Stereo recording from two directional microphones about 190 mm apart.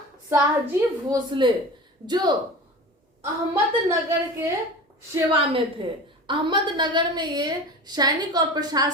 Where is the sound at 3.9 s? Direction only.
15° right (ahead or behind).